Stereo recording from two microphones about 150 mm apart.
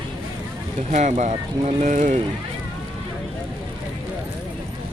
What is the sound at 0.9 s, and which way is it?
Speech, 50° right (ahead or behind).